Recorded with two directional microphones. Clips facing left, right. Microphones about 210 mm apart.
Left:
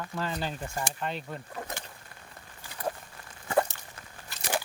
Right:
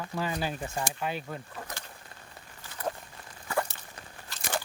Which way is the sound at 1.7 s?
20° left (ahead or behind).